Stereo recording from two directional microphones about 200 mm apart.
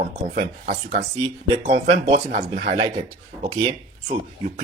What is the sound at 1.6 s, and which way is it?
Speech, 35° right (ahead or behind).